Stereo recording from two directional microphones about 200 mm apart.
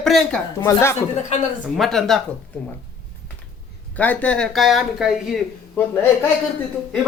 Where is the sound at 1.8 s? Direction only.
Centre (ahead or behind).